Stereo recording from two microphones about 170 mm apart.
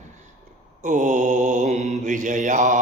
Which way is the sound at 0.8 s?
45° right (ahead or behind).